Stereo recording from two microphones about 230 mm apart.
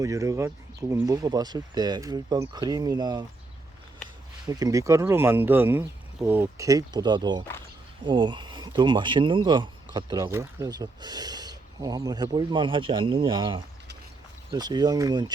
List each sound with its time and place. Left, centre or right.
0.0 s speech: centre
4.4 s speech: centre